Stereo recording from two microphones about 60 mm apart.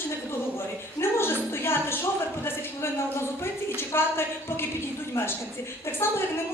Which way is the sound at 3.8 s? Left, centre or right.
Left.